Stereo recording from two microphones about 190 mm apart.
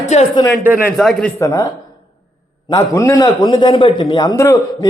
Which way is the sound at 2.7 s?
20° left (ahead or behind).